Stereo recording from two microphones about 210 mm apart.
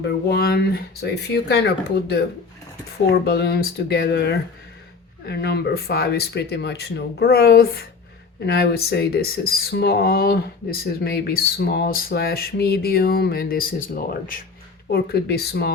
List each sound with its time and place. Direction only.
0.3 s speech: 45° left (ahead or behind)